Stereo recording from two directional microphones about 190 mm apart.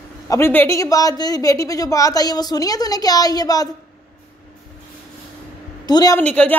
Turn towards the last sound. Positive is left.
turn(degrees=5)  # may be behind; listen again after turning